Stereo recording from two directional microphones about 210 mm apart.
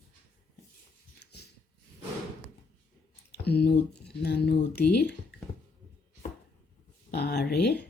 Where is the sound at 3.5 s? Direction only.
50° left (ahead or behind).